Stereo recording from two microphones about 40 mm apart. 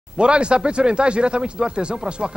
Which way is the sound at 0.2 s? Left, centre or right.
Right.